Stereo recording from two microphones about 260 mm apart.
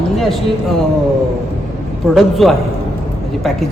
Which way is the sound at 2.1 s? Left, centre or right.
Centre.